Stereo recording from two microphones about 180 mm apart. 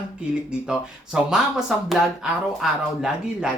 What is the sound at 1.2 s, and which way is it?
Speech, 5° right (ahead or behind).